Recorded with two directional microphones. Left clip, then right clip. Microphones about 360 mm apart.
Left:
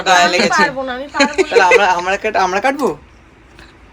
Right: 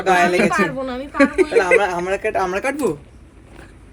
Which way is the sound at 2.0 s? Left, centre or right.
Left.